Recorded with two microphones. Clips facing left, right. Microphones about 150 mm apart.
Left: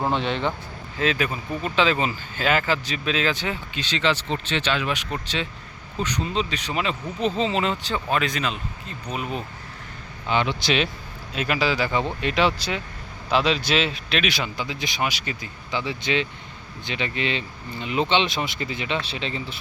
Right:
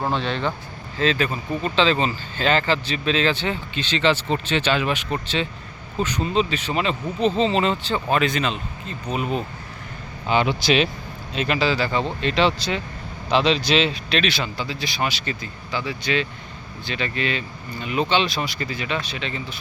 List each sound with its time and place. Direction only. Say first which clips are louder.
0.1 s speech: even; 15° left (ahead or behind); by 10.8 s 5° right (ahead or behind)
11.3 s speech: right 2 dB; 5° left (ahead or behind)
15.7 s speech: right 1 dB; 20° left (ahead or behind)